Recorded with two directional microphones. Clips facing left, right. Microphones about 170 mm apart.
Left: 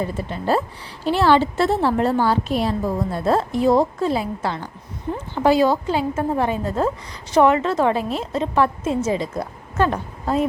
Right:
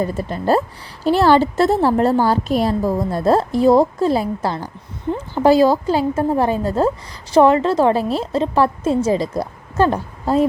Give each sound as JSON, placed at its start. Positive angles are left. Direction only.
{"t": 0.0, "sound": "a woman's voice", "side_deg": -40}